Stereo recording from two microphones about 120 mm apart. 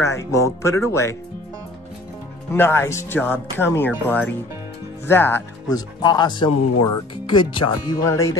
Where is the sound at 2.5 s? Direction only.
20° left (ahead or behind).